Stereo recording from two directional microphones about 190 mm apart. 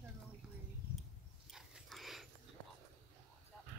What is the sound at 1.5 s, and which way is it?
Dog, centre (ahead or behind).